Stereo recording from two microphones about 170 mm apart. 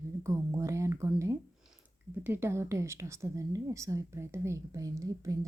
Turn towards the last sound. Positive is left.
turn(degrees=-20)  # may be behind; listen again after turning